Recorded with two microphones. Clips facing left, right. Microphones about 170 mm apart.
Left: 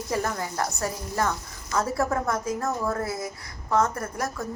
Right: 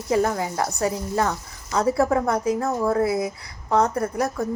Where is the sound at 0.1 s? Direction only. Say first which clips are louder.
Right 8 dB; 15° right (ahead or behind).